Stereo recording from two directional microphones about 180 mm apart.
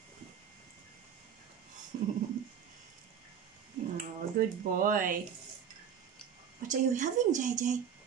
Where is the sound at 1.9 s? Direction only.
45° right (ahead or behind).